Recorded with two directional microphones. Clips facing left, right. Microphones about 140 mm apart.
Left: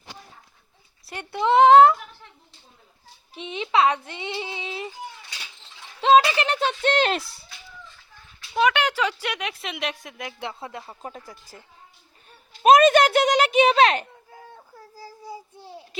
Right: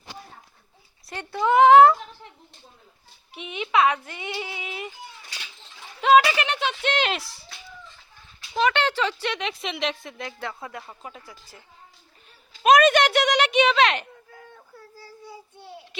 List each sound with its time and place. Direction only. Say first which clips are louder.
1.1 s speech: left 1 dB; 20° left (ahead or behind)
3.3 s speech: left 1 dB; 30° left (ahead or behind)
6.0 s a child's voice: left 1 dB; 30° left (ahead or behind); by 7.2 s 45° left (ahead or behind)
8.5 s a woman's voice: left 1 dB; 10° left (ahead or behind)
11.0 s a child's voice: left 3 dB; 40° left (ahead or behind)
12.6 s a child's voice: left 2 dB; 35° left (ahead or behind)
14.8 s child singing: left 2 dB; 35° left (ahead or behind)